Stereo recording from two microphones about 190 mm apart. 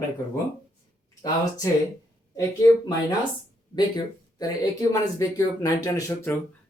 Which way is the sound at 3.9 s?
20° left (ahead or behind).